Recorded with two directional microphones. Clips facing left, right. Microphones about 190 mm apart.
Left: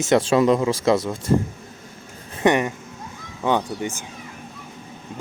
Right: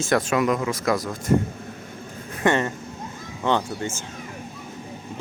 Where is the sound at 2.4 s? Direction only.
15° left (ahead or behind).